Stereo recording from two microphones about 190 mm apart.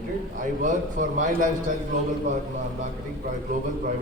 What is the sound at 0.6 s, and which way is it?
Speech, 40° right (ahead or behind).